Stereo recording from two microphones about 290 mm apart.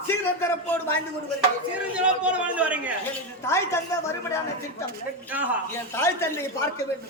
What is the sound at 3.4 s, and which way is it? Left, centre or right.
Speech, centre.